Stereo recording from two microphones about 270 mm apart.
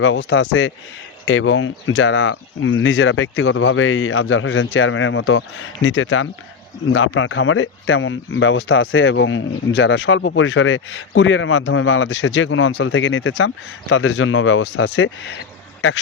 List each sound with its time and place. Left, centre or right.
0.3 s speech: left